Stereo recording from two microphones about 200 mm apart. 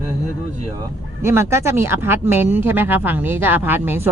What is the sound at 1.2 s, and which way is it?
Speech, 15° right (ahead or behind).